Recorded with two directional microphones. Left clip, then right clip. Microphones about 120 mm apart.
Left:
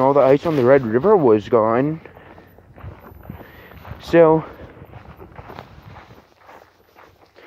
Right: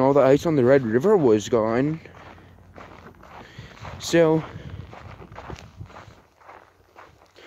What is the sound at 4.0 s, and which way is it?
Speech, 5° right (ahead or behind).